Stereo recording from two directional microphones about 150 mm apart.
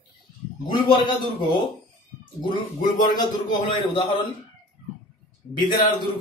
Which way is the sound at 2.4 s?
30° left (ahead or behind).